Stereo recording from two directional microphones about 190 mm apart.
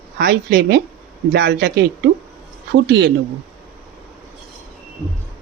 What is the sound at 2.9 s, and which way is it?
Speech, 65° right (ahead or behind).